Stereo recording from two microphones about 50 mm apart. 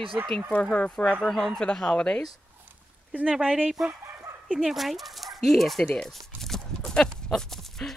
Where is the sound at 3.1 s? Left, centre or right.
Right; by 5.9 s centre.